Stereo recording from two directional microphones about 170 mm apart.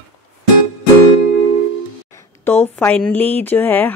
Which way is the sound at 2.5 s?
10° left (ahead or behind).